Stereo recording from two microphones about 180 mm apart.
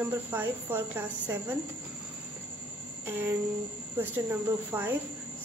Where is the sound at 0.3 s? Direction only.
10° right (ahead or behind).